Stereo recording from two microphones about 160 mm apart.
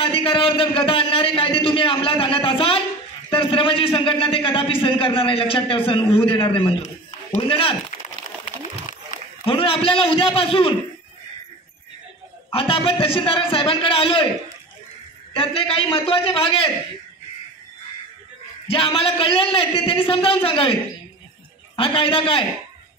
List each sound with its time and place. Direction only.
0.0 s a man's voice: 35° left (ahead or behind)
9.4 s a man's voice: 35° left (ahead or behind)
12.4 s a man's voice: 35° left (ahead or behind)
15.3 s a man's voice: 35° left (ahead or behind)
18.7 s a man's voice: 35° left (ahead or behind)
21.7 s a man's voice: 35° left (ahead or behind)